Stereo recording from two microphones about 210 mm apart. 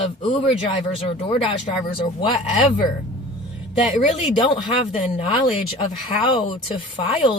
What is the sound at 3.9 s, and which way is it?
Speech, 35° left (ahead or behind).